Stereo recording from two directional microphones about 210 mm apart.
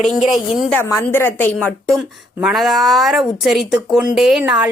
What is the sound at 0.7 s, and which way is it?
A woman's voice, 10° left (ahead or behind).